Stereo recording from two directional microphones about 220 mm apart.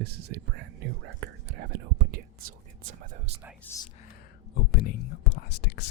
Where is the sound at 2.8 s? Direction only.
35° right (ahead or behind).